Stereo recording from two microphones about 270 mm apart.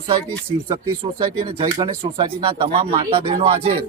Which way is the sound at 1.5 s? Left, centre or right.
Centre.